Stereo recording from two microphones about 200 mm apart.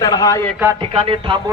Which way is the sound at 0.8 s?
25° right (ahead or behind).